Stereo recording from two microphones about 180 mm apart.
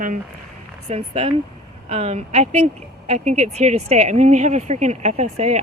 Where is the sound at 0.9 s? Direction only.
35° right (ahead or behind).